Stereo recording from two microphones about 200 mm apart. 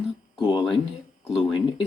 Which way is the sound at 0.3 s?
20° left (ahead or behind).